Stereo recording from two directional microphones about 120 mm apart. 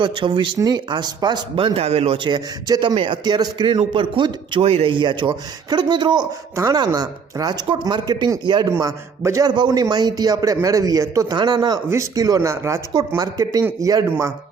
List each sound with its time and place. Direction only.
0.0 s a man's voice: 40° right (ahead or behind)
4.6 s speech: 55° right (ahead or behind); by 14.3 s 25° right (ahead or behind)